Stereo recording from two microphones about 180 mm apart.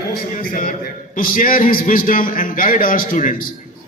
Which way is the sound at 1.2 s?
50° left (ahead or behind).